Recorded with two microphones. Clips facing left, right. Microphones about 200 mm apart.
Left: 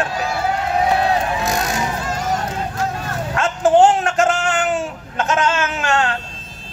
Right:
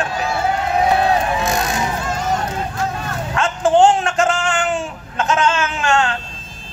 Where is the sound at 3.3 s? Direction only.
40° left (ahead or behind).